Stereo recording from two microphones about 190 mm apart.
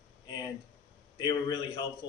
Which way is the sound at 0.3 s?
20° left (ahead or behind).